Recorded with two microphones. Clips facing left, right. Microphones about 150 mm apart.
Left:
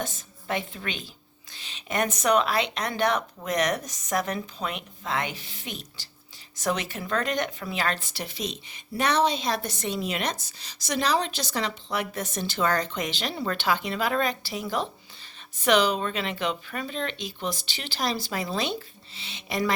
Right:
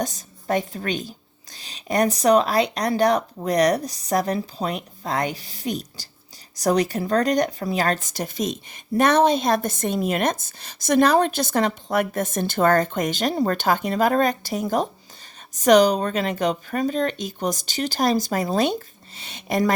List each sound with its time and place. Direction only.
0.0 s a woman's voice: 40° right (ahead or behind)